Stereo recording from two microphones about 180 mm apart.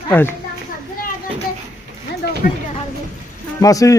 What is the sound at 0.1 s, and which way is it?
Speech, 10° left (ahead or behind).